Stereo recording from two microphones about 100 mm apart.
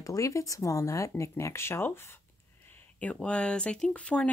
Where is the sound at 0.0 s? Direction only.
30° left (ahead or behind).